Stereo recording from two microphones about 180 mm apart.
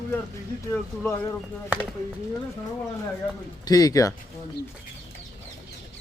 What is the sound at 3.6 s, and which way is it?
Speech, 20° left (ahead or behind).